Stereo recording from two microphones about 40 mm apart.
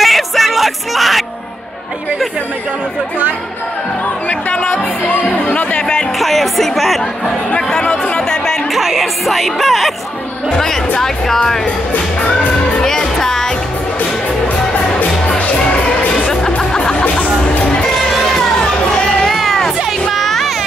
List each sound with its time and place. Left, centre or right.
0.0 s music: centre
4.6 s music: left
5.8 s music: left
6.1 s speech: centre
7.8 s chatter: left
8.7 s music: centre
11.6 s music: left
12.8 s music: centre
14.7 s music: left
17.1 s music: left
18.3 s crowd: centre
19.2 s a sound: centre